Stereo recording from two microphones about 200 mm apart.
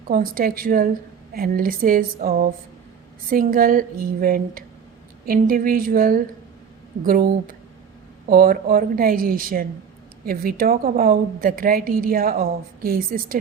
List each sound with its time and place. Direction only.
0.1 s a woman's voice: 45° right (ahead or behind)